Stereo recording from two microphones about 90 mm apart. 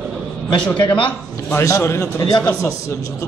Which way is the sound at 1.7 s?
35° left (ahead or behind).